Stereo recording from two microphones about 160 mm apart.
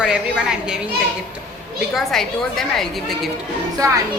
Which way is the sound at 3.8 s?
20° right (ahead or behind).